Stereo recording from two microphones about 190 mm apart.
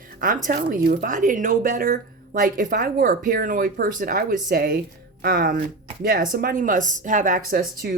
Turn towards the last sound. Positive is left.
turn(degrees=-50)  # may be behind; listen again after turning